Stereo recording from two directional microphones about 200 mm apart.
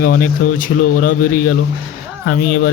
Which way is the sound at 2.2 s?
60° left (ahead or behind).